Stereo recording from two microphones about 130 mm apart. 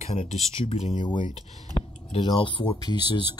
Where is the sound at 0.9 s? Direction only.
35° left (ahead or behind).